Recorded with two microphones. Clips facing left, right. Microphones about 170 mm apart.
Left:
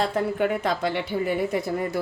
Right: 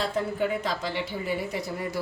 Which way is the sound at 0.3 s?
60° left (ahead or behind).